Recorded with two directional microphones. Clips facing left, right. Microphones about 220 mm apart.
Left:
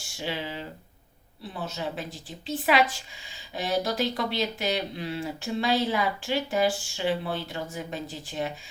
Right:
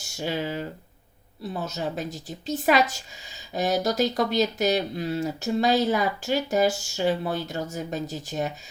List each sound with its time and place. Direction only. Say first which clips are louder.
0.0 s speech: right 4 dB; 45° right (ahead or behind)